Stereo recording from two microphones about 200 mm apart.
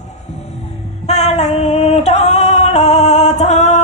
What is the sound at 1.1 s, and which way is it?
Music, 35° left (ahead or behind).